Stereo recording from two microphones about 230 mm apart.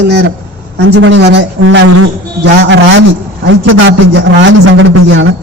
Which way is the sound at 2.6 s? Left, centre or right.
Right.